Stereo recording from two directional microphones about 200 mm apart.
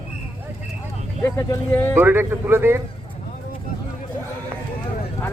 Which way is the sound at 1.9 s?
10° right (ahead or behind).